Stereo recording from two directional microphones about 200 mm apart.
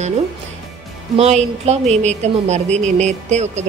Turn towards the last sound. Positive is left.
turn(degrees=-35)  # may be behind; listen again after turning